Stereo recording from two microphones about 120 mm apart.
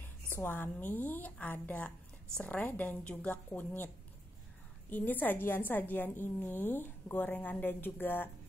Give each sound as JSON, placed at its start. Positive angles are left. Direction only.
{"t": 0.4, "sound": "a woman's voice", "side_deg": 15}